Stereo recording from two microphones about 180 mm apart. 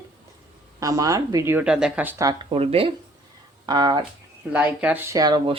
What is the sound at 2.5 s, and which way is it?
Speech, 35° right (ahead or behind).